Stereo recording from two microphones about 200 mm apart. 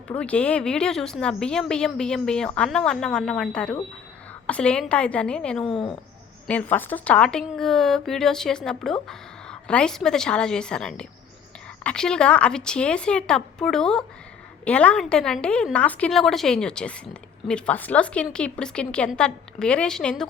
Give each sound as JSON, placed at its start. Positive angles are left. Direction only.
{"t": 0.1, "sound": "a woman's voice", "side_deg": 5}
{"t": 5.6, "sound": "a woman's voice", "side_deg": 25}
{"t": 6.5, "sound": "a woman's voice", "side_deg": 10}